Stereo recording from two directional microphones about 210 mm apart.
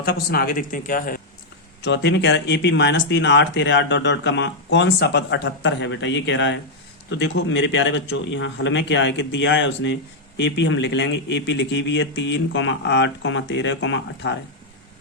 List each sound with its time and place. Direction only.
0.0 s speech: 50° left (ahead or behind)
1.8 s speech: 55° left (ahead or behind)